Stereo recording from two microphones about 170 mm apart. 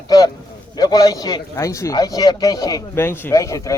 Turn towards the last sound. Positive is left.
turn(degrees=20)  # may be behind; listen again after turning